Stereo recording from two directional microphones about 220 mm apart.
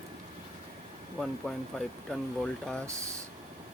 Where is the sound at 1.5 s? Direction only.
5° left (ahead or behind).